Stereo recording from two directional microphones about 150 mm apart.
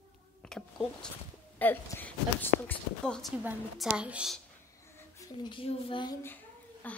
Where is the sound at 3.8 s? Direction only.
10° right (ahead or behind).